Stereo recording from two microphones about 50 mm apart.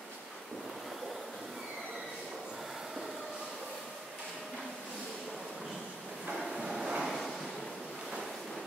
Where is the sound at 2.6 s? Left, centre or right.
Centre.